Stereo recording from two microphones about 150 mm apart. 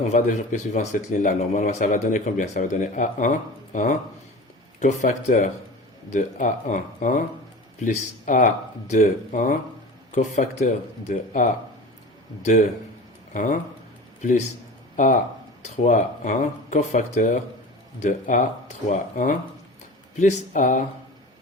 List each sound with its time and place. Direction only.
0.1 s a man's voice: 50° left (ahead or behind)
11.1 s a man's voice: 60° left (ahead or behind)
13.3 s a man's voice: 60° left (ahead or behind)